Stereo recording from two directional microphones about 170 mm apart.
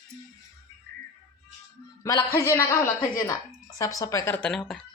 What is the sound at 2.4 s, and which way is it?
A woman's voice, 15° left (ahead or behind).